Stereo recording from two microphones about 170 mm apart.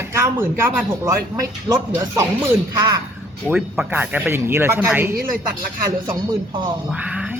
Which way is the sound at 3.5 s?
10° right (ahead or behind).